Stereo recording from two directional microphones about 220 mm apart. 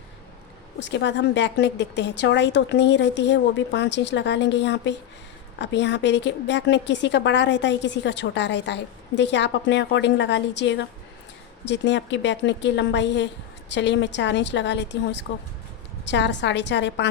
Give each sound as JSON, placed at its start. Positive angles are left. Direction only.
{"t": 0.9, "sound": "a woman's voice", "side_deg": 55}